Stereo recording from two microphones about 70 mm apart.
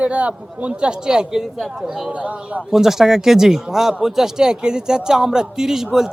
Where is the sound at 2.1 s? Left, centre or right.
Centre.